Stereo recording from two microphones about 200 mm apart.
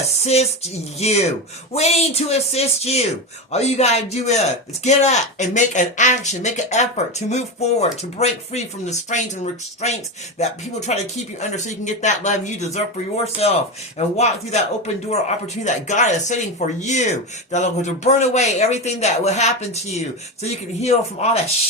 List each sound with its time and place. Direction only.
0.3 s a man's voice: 30° left (ahead or behind)
15.6 s a man's voice: 35° left (ahead or behind)